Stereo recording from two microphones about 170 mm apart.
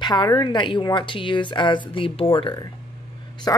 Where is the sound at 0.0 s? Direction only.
25° left (ahead or behind).